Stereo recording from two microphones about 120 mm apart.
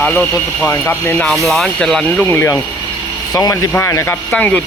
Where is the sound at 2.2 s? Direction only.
25° left (ahead or behind).